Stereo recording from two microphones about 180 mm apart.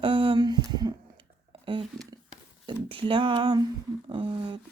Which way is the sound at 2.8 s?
30° right (ahead or behind).